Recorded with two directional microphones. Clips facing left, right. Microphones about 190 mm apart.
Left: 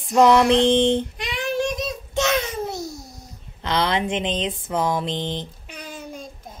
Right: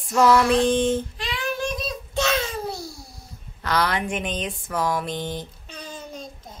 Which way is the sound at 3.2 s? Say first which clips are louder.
Right 3 dB; 25° left (ahead or behind).